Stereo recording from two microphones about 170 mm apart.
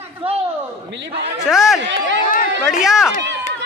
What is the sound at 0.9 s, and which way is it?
Speech, 90° right.